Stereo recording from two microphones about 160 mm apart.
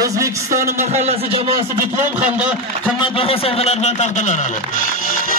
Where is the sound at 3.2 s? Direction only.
35° left (ahead or behind).